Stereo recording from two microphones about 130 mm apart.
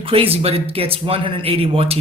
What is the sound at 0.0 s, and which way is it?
Speech, 45° right (ahead or behind).